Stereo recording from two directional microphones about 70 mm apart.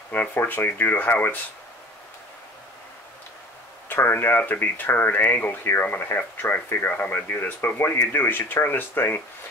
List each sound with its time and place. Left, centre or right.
0.1 s speech: left
3.9 s speech: left